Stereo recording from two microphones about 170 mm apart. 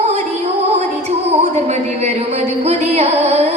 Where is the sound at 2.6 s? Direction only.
40° right (ahead or behind).